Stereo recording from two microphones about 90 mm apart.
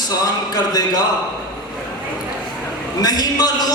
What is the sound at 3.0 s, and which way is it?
Speech, 45° left (ahead or behind).